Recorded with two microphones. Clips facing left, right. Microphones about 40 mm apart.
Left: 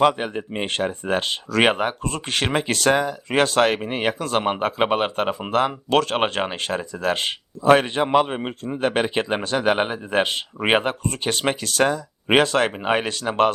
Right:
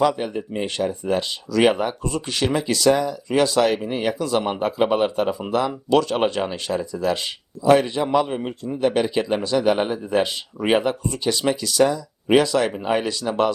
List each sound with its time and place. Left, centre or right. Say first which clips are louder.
0.0 s speech: left 1 dB; left